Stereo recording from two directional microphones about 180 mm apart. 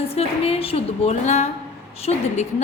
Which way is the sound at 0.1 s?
35° left (ahead or behind).